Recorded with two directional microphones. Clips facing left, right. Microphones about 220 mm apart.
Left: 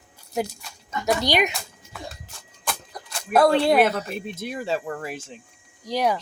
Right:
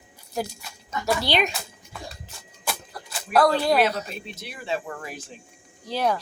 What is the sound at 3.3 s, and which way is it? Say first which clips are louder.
Speech: left 2 dB; 25° left (ahead or behind).